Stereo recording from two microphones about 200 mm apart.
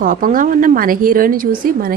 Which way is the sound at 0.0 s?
45° right (ahead or behind).